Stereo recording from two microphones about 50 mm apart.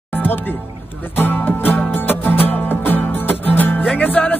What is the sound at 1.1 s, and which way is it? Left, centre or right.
Music, left.